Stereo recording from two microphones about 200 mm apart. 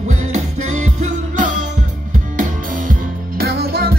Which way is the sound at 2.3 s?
45° right (ahead or behind).